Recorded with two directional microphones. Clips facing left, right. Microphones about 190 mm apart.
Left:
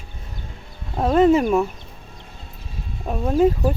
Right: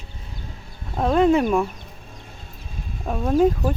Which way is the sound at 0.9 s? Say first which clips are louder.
Left 2 dB; centre (ahead or behind).